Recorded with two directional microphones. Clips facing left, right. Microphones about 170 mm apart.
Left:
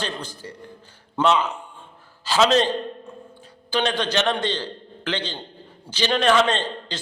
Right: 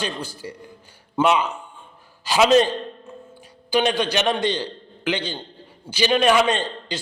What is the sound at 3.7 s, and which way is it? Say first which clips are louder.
A man's voice: right 3 dB; 10° right (ahead or behind).